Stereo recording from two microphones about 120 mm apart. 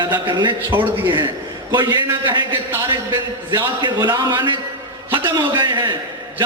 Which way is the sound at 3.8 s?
35° right (ahead or behind).